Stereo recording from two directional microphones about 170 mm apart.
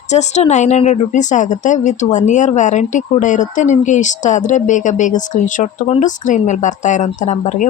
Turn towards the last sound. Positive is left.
turn(degrees=45)  # may be behind; listen again after turning